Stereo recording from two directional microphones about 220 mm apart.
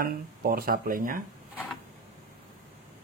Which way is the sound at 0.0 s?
40° right (ahead or behind).